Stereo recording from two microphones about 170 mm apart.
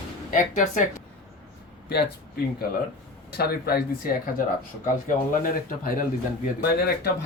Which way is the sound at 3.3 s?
65° left (ahead or behind).